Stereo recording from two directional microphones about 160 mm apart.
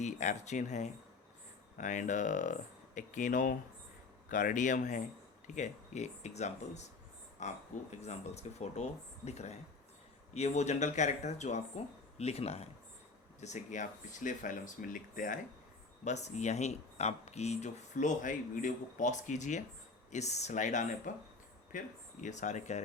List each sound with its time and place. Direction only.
0.0 s speech: 45° left (ahead or behind)
16.0 s speech: 45° left (ahead or behind)